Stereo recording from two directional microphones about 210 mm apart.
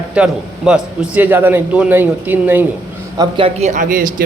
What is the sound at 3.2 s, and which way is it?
Speech, 25° right (ahead or behind).